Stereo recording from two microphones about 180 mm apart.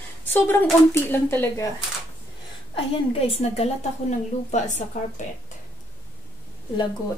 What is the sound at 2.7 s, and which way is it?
A woman's voice, 30° left (ahead or behind).